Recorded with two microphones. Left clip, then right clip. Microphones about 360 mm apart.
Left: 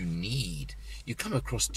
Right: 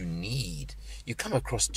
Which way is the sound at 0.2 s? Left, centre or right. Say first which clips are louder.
Even; centre.